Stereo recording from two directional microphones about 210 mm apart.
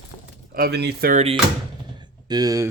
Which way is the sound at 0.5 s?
50° right (ahead or behind).